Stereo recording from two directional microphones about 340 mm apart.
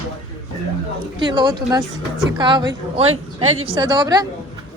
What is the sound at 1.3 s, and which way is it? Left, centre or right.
A woman's voice, centre.